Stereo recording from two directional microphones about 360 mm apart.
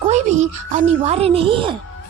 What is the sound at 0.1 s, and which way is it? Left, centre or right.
A woman's voice, centre.